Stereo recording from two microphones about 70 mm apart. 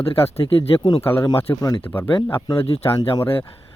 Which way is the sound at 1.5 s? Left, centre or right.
Left.